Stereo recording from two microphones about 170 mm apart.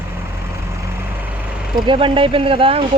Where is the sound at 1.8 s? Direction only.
30° right (ahead or behind).